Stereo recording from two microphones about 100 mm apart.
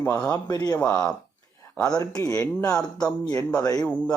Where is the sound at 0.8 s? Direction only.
10° left (ahead or behind).